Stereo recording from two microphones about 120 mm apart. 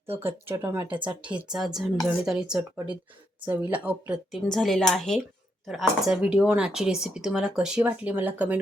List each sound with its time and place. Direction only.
0.2 s speech: 20° right (ahead or behind)
0.9 s speech: 45° right (ahead or behind)
1.5 s a woman's voice: 5° right (ahead or behind)
4.4 s a woman's voice: 5° left (ahead or behind); by 8.5 s 15° right (ahead or behind)